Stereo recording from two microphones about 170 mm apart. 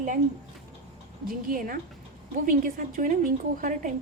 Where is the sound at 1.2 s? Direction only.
55° right (ahead or behind).